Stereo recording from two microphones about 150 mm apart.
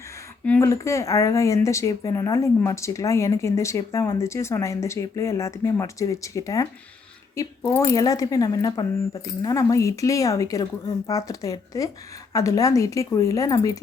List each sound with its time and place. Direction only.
0.4 s speech: 10° left (ahead or behind)
0.7 s speech: 20° left (ahead or behind)